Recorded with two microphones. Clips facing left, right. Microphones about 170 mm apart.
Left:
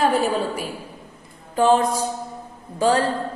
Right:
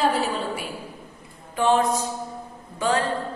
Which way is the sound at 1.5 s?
35° left (ahead or behind).